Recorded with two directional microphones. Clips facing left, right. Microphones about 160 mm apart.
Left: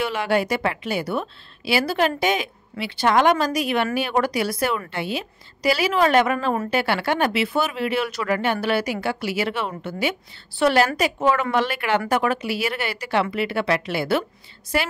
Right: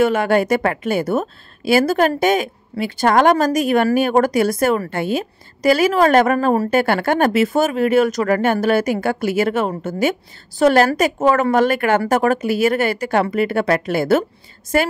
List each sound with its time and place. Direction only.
0.0 s a woman's voice: 50° right (ahead or behind)